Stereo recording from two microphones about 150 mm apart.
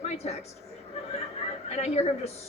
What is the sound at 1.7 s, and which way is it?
Speech, 45° left (ahead or behind).